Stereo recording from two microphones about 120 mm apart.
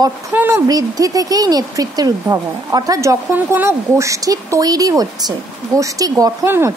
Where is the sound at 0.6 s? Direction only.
30° right (ahead or behind).